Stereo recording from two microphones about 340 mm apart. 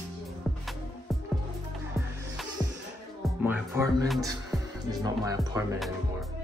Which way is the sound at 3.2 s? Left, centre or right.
Centre.